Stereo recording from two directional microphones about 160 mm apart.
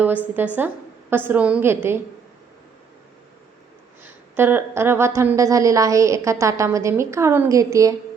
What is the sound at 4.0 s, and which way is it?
A woman's voice, 15° right (ahead or behind).